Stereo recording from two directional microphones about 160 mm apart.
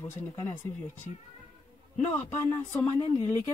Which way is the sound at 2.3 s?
15° left (ahead or behind).